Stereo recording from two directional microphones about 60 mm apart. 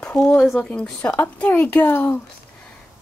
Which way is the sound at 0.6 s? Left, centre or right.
Centre.